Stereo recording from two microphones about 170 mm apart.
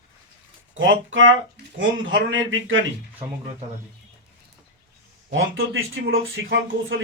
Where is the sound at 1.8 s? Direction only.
90° right.